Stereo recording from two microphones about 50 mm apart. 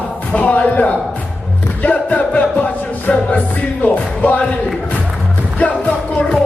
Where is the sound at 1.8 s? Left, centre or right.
Left.